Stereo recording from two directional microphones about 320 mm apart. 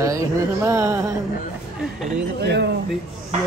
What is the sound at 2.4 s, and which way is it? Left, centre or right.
Speech, right.